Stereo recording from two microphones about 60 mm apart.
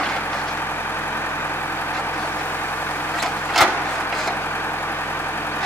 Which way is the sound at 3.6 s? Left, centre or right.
Centre.